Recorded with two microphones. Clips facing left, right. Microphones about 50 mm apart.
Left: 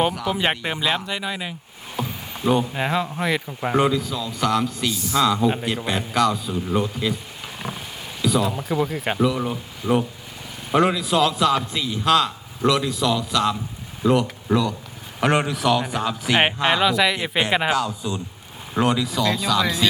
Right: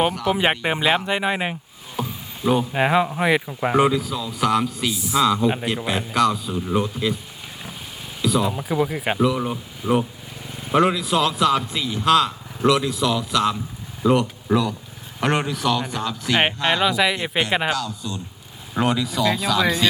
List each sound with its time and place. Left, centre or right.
0.1 s a man's voice: centre
0.6 s speech: centre; by 1.5 s right
2.0 s rowboat: centre
2.7 s a man's voice: centre
8.2 s a man's voice: centre
17.7 s speech: centre
18.7 s a man's voice: centre